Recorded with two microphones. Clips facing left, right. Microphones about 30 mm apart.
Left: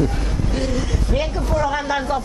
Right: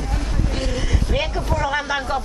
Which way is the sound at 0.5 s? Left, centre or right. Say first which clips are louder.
Left 3 dB; centre.